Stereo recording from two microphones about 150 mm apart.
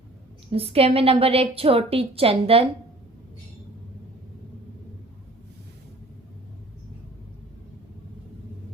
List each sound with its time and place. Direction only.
0.5 s a woman's voice: 40° right (ahead or behind)